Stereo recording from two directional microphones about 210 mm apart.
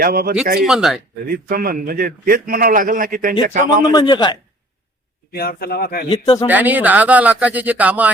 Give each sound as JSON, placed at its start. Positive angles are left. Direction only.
{"t": 0.0, "sound": "a man's voice", "side_deg": -45}
{"t": 0.6, "sound": "speech", "side_deg": 0}
{"t": 1.3, "sound": "a man's voice", "side_deg": -45}
{"t": 3.9, "sound": "speech", "side_deg": 20}
{"t": 5.3, "sound": "speech", "side_deg": 45}
{"t": 6.1, "sound": "speech", "side_deg": 25}
{"t": 6.5, "sound": "speech", "side_deg": -10}